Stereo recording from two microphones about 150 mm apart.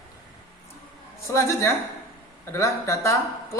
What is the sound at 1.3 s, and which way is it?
A man's voice, 20° left (ahead or behind).